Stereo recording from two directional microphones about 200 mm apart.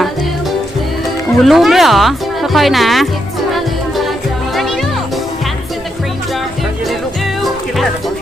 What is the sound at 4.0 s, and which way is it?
Music, centre (ahead or behind).